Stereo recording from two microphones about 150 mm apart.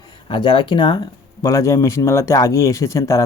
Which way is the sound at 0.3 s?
30° left (ahead or behind).